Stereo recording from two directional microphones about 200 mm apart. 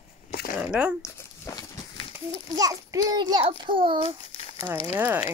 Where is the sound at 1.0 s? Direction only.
15° left (ahead or behind).